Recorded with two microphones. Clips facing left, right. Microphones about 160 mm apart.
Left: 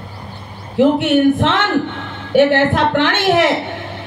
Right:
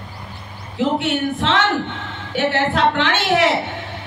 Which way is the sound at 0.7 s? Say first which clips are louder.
Left 7 dB; 55° left (ahead or behind).